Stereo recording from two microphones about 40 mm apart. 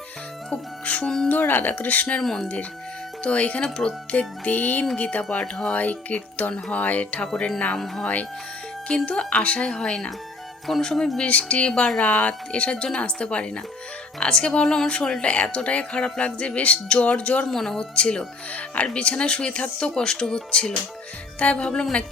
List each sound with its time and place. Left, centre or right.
0.5 s speech: left
1.0 s speech: centre
1.3 s speech: left
2.2 s speech: centre
3.2 s speech: left
4.5 s speech: left
10.7 s speech: centre
11.2 s speech: left
17.5 s speech: centre
17.7 s speech: left
20.0 s speech: centre